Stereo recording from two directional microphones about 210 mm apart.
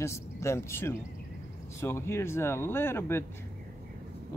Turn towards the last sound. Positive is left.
turn(degrees=10)  # may be behind; listen again after turning